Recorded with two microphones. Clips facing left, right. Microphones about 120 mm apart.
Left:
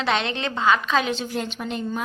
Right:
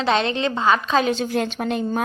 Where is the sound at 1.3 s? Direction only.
65° right (ahead or behind).